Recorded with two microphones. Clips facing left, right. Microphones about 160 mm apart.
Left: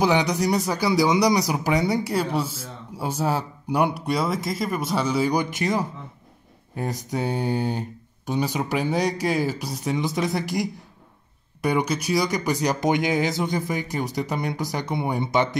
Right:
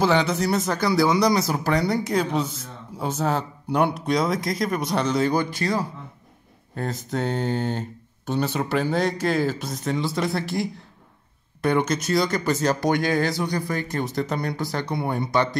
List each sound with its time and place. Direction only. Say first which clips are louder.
0.0 s speech: even; 15° left (ahead or behind)